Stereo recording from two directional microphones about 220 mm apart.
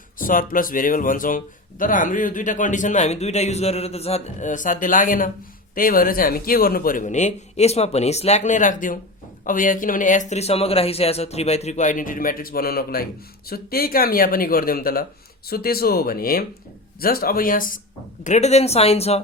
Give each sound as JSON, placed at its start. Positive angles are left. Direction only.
{"t": 0.2, "sound": "speech", "side_deg": 40}